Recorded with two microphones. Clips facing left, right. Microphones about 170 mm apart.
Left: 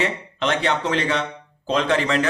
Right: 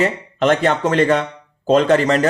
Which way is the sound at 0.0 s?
45° right (ahead or behind).